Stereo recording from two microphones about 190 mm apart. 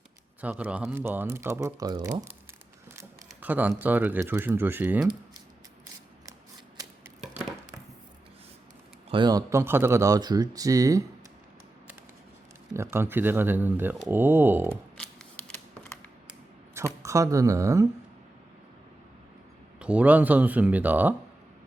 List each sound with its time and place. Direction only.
0.4 s speech: 5° right (ahead or behind)
3.2 s speech: 10° right (ahead or behind)
7.2 s a sound: 5° right (ahead or behind)
9.0 s speech: 25° right (ahead or behind)
12.7 s speech: 15° right (ahead or behind)
14.9 s a sound: 5° left (ahead or behind)
17.0 s speech: 15° right (ahead or behind)
19.8 s speech: 5° right (ahead or behind)